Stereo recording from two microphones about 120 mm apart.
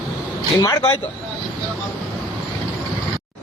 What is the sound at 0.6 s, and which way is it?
Speech, 30° left (ahead or behind).